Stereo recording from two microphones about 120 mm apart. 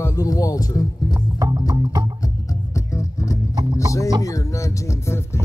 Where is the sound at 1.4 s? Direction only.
30° right (ahead or behind).